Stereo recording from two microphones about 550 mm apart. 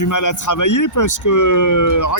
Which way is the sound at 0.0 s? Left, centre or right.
Left.